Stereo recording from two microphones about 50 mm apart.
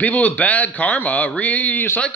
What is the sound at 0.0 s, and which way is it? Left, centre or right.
Speech, left.